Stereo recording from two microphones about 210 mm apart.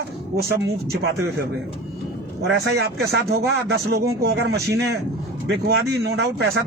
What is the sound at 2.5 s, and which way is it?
A man's voice, 50° right (ahead or behind).